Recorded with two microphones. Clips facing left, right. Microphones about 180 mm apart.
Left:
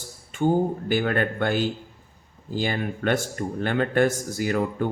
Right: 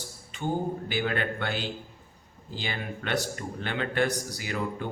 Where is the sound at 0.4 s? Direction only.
45° left (ahead or behind).